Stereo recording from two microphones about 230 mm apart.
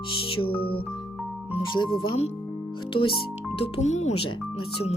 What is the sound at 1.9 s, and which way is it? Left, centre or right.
Speech, left.